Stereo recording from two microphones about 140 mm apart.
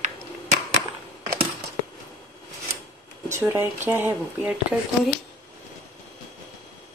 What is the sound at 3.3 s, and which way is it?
Speech, 15° right (ahead or behind).